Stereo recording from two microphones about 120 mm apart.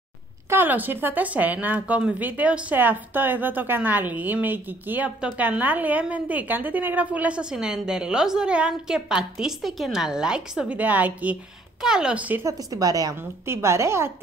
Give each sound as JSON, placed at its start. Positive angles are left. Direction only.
{"t": 0.5, "sound": "a woman's voice", "side_deg": -15}
{"t": 12.4, "sound": "a woman's voice", "side_deg": -30}